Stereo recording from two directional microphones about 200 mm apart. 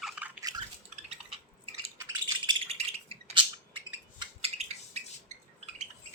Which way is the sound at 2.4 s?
25° right (ahead or behind).